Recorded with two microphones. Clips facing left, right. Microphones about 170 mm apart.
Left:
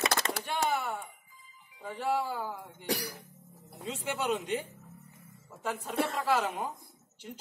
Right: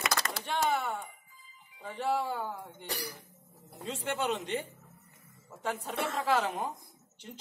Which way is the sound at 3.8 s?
10° left (ahead or behind).